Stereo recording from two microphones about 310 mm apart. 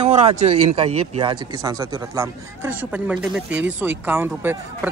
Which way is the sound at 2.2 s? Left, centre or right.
Centre.